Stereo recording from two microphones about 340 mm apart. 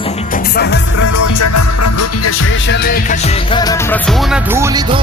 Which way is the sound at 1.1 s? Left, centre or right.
Left.